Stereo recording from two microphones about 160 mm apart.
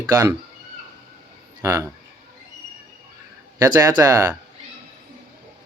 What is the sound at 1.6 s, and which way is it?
Speech, 20° right (ahead or behind).